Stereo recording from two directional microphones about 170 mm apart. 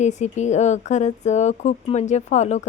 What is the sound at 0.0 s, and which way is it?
A woman's voice, 45° left (ahead or behind).